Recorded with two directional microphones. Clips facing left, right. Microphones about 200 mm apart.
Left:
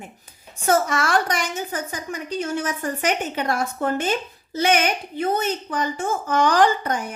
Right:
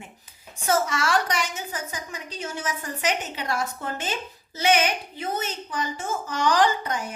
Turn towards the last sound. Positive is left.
turn(degrees=55)  # may be behind; listen again after turning